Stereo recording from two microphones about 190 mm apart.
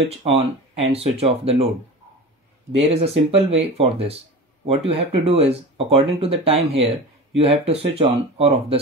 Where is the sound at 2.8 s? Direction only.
30° right (ahead or behind).